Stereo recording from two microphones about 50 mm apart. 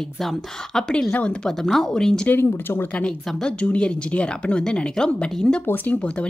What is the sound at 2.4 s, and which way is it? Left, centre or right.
Speech, left.